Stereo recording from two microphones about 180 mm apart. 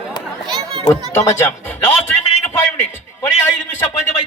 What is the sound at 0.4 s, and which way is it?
Children playing, 30° right (ahead or behind).